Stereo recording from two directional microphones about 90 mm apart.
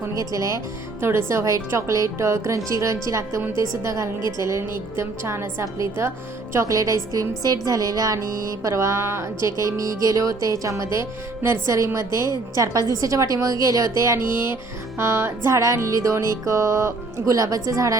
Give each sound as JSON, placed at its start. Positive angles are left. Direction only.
{"t": 0.2, "sound": "a woman's voice", "side_deg": -40}